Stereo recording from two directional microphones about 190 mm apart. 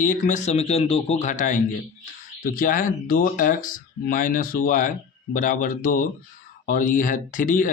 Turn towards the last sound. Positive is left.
turn(degrees=45)  # may be behind; listen again after turning